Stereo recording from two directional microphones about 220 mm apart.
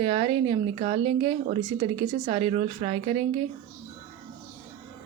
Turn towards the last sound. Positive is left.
turn(degrees=-30)  # may be behind; listen again after turning